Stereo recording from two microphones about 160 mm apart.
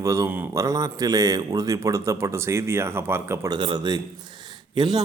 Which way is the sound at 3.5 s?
30° right (ahead or behind).